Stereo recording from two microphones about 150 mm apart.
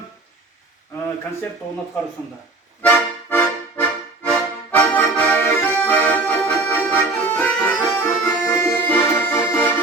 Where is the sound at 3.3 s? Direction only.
10° left (ahead or behind).